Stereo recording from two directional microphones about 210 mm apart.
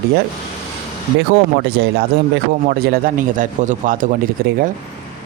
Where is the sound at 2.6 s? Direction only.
40° right (ahead or behind).